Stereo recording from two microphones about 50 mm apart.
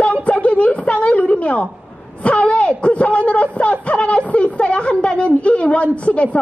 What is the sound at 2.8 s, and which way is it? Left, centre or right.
A child's voice, left.